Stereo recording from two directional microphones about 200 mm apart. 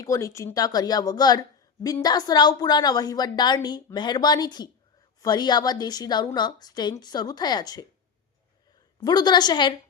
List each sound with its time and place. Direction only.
0.0 s a woman's voice: 15° left (ahead or behind)
9.0 s a woman's voice: 20° left (ahead or behind)